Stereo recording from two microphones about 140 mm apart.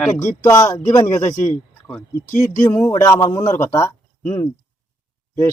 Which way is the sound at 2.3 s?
65° left (ahead or behind).